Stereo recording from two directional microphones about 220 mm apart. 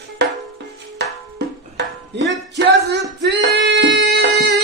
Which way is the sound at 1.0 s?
50° right (ahead or behind).